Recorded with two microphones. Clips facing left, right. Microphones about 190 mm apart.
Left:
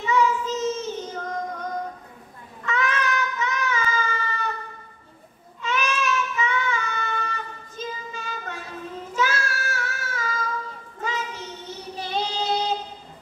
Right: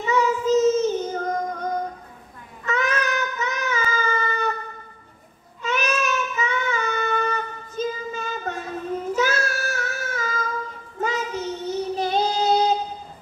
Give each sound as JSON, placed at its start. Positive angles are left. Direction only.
{"t": 0.0, "sound": "child singing", "side_deg": -40}
{"t": 2.6, "sound": "child singing", "side_deg": -40}
{"t": 5.6, "sound": "child singing", "side_deg": -40}